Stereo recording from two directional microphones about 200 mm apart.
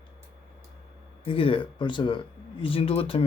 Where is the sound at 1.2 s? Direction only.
25° left (ahead or behind).